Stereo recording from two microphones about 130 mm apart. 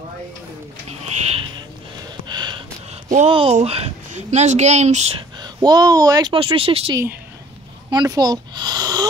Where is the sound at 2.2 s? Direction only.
35° right (ahead or behind).